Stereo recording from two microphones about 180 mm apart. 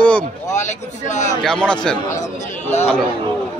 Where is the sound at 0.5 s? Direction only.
40° left (ahead or behind).